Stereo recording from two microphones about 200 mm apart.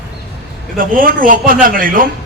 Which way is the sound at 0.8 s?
45° right (ahead or behind).